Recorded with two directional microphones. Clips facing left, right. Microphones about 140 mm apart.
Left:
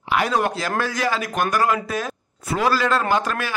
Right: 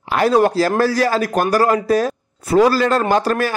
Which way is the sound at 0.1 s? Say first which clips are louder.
Right 7 dB; 40° right (ahead or behind).